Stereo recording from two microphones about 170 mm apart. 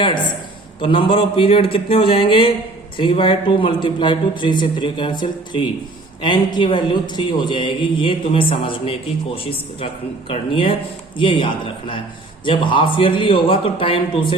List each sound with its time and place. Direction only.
0.8 s a man's voice: 30° left (ahead or behind)